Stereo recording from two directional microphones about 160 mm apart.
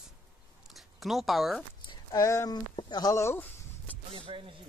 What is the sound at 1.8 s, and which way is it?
Speech, 25° left (ahead or behind).